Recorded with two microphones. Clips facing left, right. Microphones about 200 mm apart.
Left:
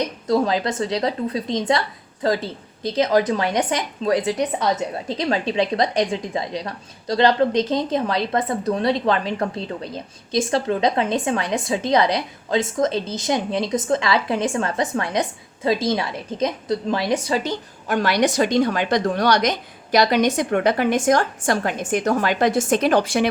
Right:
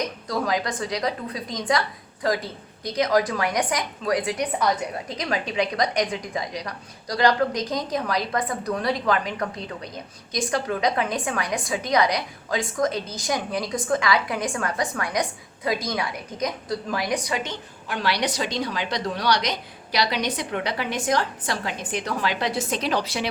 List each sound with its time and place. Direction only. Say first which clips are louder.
0.3 s a woman's voice: left 7 dB; 25° left (ahead or behind); by 23.3 s 50° left (ahead or behind)